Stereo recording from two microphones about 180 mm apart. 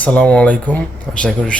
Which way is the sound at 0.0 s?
10° left (ahead or behind).